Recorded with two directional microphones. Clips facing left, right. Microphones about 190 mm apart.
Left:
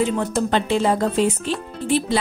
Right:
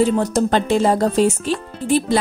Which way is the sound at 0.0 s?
40° right (ahead or behind).